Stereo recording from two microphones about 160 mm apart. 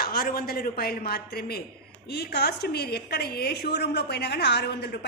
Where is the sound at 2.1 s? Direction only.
90° left.